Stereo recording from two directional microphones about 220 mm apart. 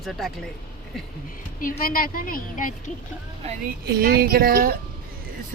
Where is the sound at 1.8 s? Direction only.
40° left (ahead or behind).